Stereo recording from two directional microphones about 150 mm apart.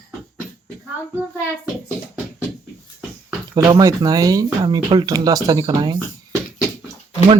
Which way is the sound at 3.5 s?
25° right (ahead or behind).